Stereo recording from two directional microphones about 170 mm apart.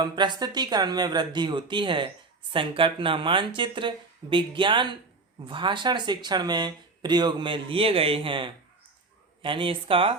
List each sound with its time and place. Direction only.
0.0 s speech: 25° right (ahead or behind)